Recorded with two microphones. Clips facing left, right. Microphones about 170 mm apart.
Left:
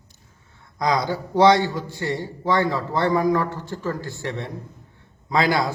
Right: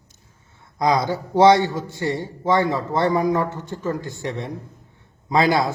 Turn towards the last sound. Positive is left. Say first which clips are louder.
# right 2 dB
turn(degrees=-25)  # may be behind; listen again after turning